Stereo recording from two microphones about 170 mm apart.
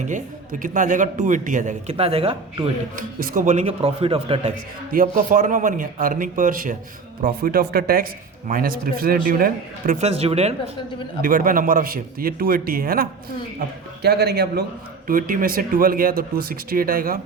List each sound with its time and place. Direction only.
0.6 s a man's voice: 50° right (ahead or behind); by 2.6 s 35° right (ahead or behind)
2.9 s a man's voice: 55° right (ahead or behind); by 4.5 s 35° right (ahead or behind)
4.9 s a man's voice: 55° right (ahead or behind)
10.0 s speech: 35° right (ahead or behind)
11.2 s speech: 55° right (ahead or behind)
14.0 s a man's voice: 70° right (ahead or behind)
15.0 s speech: 55° right (ahead or behind)